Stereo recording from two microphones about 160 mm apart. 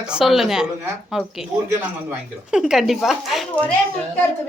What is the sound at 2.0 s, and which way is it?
Speech, 5° right (ahead or behind).